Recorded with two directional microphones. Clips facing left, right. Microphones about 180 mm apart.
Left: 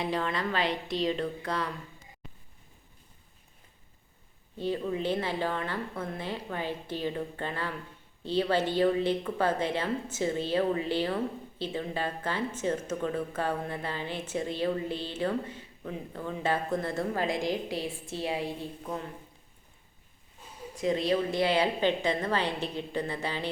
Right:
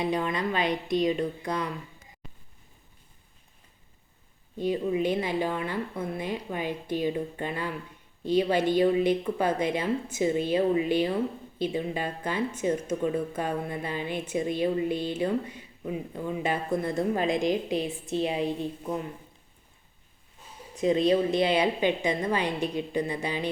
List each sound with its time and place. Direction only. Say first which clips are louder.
0.0 s a woman's voice: right 3 dB; 15° right (ahead or behind)
4.5 s a woman's voice: right 4 dB; 15° right (ahead or behind)
20.8 s a woman's voice: right 5 dB; 20° right (ahead or behind)